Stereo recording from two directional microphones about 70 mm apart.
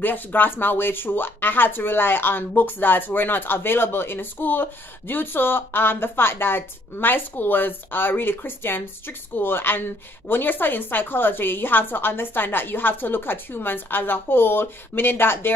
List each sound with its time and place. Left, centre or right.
0.0 s speech: left